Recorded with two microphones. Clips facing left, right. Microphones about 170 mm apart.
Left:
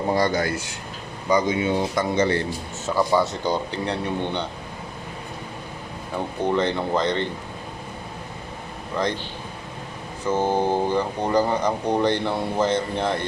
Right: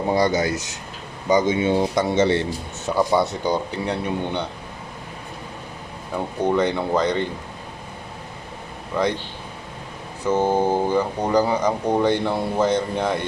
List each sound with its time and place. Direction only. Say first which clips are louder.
0.1 s speech: right 2 dB; 15° right (ahead or behind)
6.4 s speech: right 2 dB; 10° right (ahead or behind)
10.2 s speech: right 2 dB; 10° right (ahead or behind)